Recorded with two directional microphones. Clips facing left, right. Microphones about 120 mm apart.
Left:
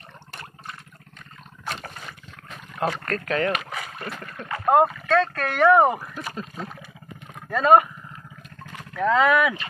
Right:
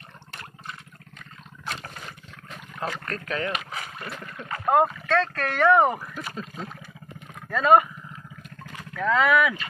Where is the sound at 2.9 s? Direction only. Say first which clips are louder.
Left 5 dB; 50° left (ahead or behind).